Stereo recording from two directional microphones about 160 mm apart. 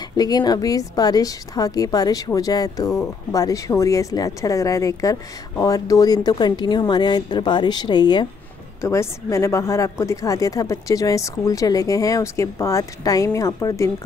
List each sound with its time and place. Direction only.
0.2 s speech: 25° left (ahead or behind)
8.8 s speech: 15° left (ahead or behind)